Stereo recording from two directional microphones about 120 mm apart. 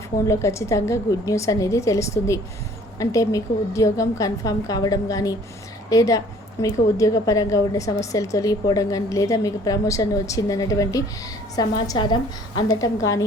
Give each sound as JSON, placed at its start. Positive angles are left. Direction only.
{"t": 0.3, "sound": "a woman's voice", "side_deg": 25}
{"t": 12.6, "sound": "a woman's voice", "side_deg": 25}